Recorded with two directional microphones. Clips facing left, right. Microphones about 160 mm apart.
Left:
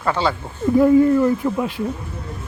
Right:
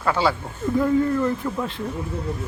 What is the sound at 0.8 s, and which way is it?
Speech, 20° left (ahead or behind).